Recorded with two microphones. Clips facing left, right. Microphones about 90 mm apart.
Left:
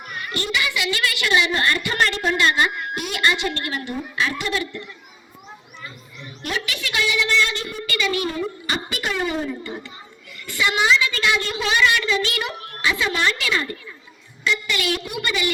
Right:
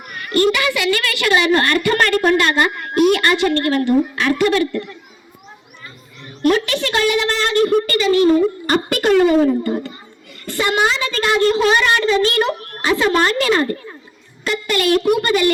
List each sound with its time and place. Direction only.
0.2 s a woman's voice: 45° right (ahead or behind)
6.2 s a woman's voice: 50° right (ahead or behind)
7.9 s a woman's voice: 35° right (ahead or behind); by 9.9 s 55° right (ahead or behind)
10.4 s a woman's voice: 40° right (ahead or behind)